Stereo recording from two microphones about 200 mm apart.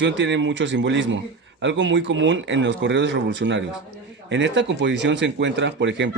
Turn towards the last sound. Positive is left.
turn(degrees=-65)  # may be behind; listen again after turning